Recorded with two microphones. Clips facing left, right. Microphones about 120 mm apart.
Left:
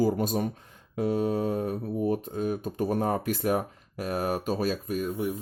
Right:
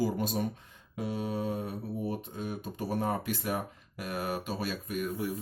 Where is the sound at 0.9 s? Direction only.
50° left (ahead or behind).